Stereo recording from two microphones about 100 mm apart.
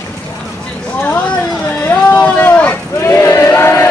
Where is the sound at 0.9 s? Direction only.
15° left (ahead or behind).